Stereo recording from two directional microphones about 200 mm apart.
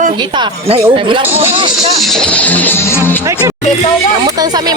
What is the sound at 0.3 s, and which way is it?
Speech, 25° right (ahead or behind).